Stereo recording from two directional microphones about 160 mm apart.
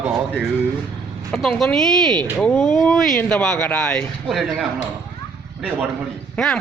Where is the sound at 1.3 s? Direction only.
5° left (ahead or behind).